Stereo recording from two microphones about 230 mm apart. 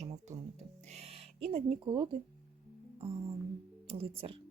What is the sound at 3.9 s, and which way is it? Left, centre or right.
Speech, right.